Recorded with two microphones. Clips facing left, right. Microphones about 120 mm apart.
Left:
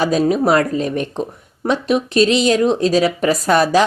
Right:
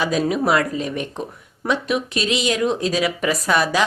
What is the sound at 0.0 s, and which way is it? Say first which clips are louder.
Speech: left 5 dB; 35° left (ahead or behind).